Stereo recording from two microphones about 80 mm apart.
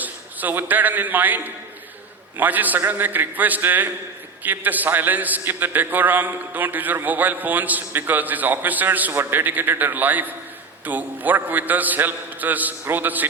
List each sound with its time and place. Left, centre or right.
0.0 s a man's voice: right